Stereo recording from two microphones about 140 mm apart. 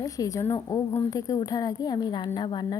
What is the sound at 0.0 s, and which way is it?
A woman's voice, 25° left (ahead or behind).